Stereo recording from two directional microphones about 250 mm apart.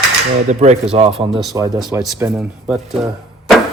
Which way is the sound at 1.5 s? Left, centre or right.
Centre.